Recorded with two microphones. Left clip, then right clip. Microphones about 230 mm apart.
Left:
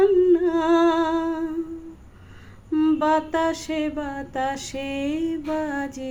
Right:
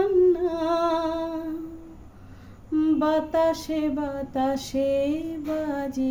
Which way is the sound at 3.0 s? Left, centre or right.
Left.